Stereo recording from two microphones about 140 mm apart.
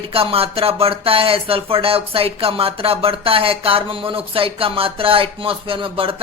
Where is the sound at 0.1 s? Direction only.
40° right (ahead or behind).